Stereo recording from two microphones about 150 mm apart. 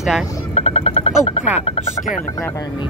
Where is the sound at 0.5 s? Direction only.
45° left (ahead or behind).